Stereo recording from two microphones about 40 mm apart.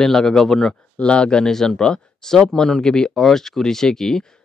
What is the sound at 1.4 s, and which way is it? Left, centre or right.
Speech, centre.